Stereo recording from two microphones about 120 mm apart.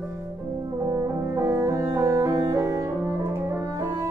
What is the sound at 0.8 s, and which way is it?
Music, 25° right (ahead or behind).